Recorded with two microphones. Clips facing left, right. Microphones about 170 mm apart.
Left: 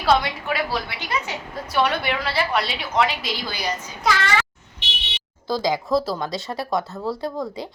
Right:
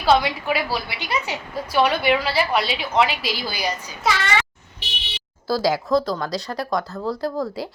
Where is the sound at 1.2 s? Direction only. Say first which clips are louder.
Right 1 dB; 20° right (ahead or behind).